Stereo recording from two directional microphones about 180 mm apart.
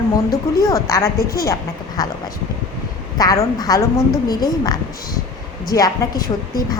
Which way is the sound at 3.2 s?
20° left (ahead or behind).